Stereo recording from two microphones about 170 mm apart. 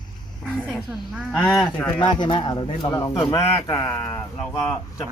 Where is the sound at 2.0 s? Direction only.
25° left (ahead or behind).